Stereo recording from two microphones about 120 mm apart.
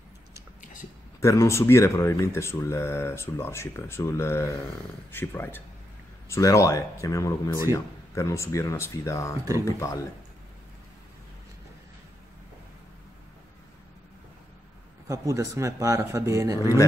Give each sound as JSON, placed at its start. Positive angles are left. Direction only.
{"t": 1.2, "sound": "speech", "side_deg": 25}
{"t": 15.0, "sound": "speech", "side_deg": -25}